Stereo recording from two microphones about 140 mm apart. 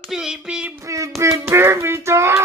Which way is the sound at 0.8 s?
25° right (ahead or behind).